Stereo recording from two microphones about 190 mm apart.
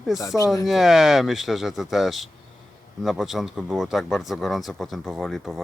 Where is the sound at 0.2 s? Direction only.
20° left (ahead or behind).